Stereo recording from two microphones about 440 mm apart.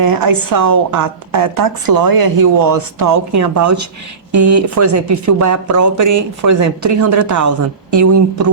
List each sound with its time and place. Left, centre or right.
0.0 s a woman's voice: right